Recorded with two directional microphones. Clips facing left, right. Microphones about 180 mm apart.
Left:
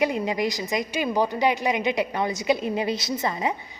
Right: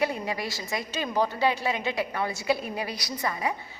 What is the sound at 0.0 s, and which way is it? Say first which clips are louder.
A woman's voice: left 5 dB; 20° left (ahead or behind).